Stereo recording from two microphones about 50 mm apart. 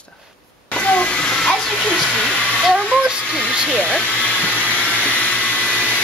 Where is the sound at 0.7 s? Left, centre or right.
Left.